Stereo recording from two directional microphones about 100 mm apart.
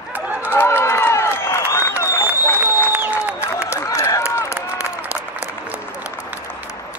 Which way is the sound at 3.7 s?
30° left (ahead or behind).